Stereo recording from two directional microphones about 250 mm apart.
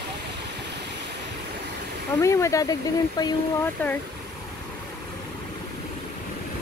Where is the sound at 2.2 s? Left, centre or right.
Centre.